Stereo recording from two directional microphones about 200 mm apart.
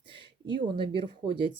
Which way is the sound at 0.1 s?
25° right (ahead or behind).